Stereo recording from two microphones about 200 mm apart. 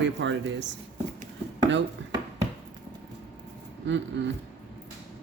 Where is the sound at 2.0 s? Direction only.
65° right (ahead or behind).